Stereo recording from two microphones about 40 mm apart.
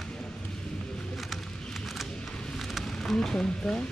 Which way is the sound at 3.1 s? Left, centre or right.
Centre.